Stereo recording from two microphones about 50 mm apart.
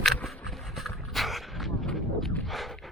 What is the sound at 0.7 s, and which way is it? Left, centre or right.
Dog, centre.